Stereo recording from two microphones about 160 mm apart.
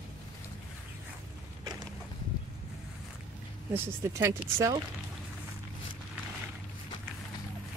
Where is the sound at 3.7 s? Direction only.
15° right (ahead or behind).